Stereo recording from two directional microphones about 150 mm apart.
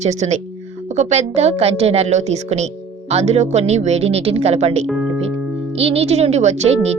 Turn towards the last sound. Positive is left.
turn(degrees=-45)  # may be behind; listen again after turning